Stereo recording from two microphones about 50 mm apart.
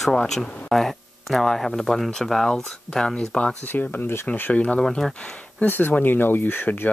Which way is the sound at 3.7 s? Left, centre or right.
Left.